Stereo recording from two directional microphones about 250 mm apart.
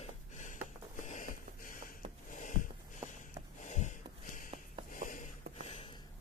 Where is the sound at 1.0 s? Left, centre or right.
Left.